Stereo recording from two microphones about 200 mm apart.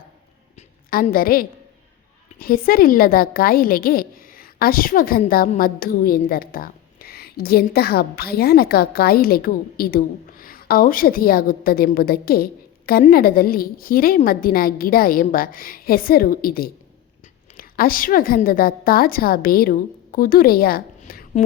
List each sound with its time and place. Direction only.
0.9 s a woman's voice: 45° left (ahead or behind)